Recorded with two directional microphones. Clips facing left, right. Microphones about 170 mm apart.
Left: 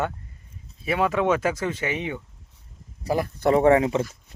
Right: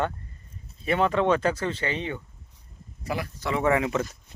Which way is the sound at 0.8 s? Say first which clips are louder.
Even; 5° left (ahead or behind).